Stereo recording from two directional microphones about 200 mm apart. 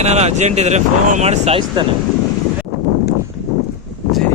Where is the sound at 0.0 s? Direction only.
35° right (ahead or behind).